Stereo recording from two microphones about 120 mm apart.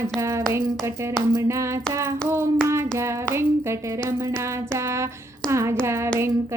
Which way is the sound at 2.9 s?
25° right (ahead or behind).